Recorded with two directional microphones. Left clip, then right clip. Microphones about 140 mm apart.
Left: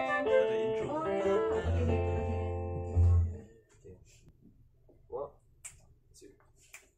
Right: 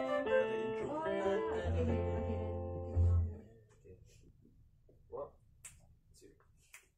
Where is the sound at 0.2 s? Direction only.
5° left (ahead or behind).